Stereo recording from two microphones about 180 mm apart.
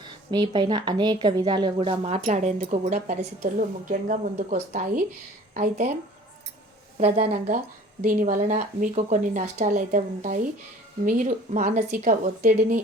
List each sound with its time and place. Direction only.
0.0 s a woman's voice: 25° right (ahead or behind); by 5.9 s 40° right (ahead or behind)
7.0 s a woman's voice: 40° right (ahead or behind)